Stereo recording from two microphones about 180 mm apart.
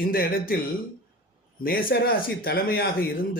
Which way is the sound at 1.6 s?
55° left (ahead or behind).